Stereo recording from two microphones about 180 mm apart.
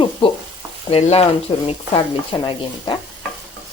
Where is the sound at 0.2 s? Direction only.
30° left (ahead or behind).